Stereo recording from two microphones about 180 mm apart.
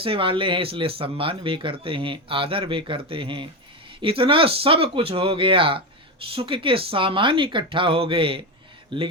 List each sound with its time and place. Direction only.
0.0 s speech: 30° right (ahead or behind)